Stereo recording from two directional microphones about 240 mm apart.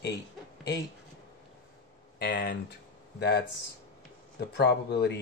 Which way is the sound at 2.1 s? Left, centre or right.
Left.